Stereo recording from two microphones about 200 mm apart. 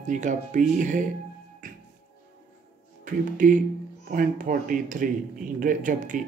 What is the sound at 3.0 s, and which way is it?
Speech, 40° right (ahead or behind).